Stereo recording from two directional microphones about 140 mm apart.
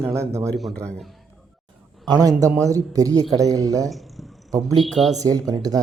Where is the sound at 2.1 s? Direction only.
25° right (ahead or behind).